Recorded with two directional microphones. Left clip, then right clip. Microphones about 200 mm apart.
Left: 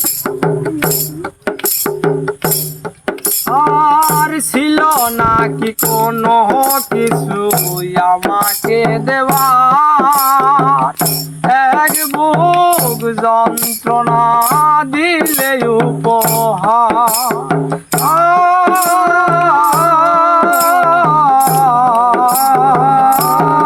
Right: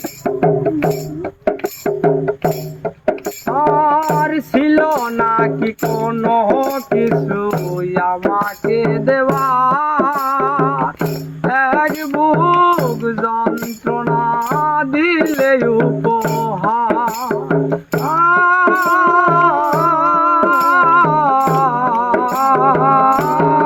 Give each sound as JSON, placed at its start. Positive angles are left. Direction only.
{"t": 2.0, "sound": "music", "side_deg": 25}
{"t": 3.8, "sound": "music", "side_deg": 30}